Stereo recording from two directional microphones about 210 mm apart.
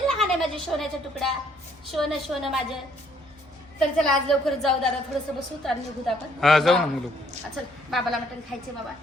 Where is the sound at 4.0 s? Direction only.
Centre (ahead or behind).